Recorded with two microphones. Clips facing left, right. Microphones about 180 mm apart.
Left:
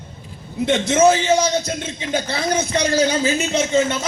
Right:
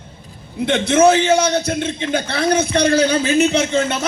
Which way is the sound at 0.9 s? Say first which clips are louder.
Right 3 dB; 60° right (ahead or behind).